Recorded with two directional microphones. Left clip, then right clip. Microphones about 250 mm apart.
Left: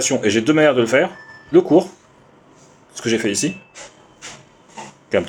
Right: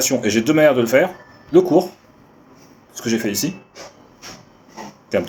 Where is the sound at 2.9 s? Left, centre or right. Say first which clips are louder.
Left 2 dB; left.